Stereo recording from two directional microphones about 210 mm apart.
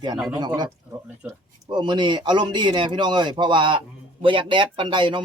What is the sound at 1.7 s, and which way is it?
Speech, 20° right (ahead or behind).